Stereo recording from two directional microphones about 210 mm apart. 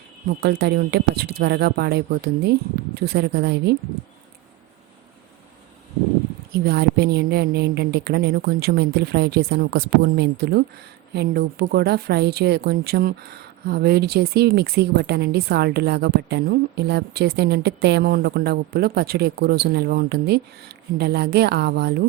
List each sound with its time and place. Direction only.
0.3 s speech: 50° right (ahead or behind)
6.7 s speech: 50° right (ahead or behind)